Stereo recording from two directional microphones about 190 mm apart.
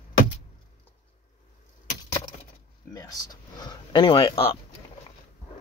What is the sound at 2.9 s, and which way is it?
Speech, 20° left (ahead or behind).